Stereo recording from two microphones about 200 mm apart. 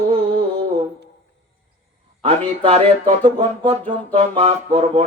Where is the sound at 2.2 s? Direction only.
30° right (ahead or behind).